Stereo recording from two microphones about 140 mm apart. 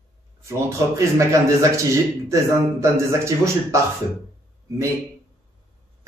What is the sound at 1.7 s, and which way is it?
Speech, 20° right (ahead or behind).